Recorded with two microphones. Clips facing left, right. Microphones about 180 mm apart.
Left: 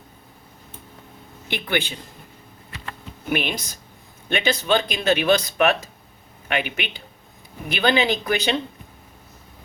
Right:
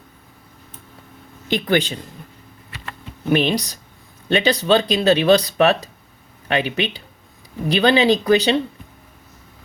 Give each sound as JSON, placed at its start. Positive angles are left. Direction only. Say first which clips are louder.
{"t": 1.5, "sound": "speech", "louder": "right 6 dB", "side_deg": -40}
{"t": 3.2, "sound": "speech", "louder": "right 7 dB", "side_deg": -35}